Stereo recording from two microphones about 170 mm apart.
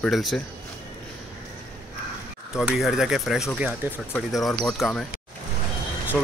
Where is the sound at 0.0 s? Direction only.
Centre (ahead or behind).